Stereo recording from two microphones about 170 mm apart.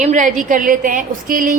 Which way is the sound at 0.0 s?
45° right (ahead or behind).